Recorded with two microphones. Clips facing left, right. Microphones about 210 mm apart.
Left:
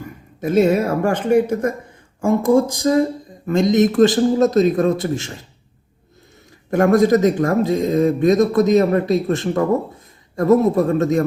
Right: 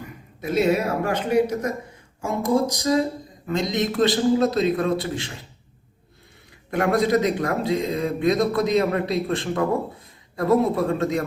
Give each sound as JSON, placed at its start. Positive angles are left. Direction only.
{"t": 0.4, "sound": "speech", "side_deg": 50}
{"t": 6.7, "sound": "speech", "side_deg": 45}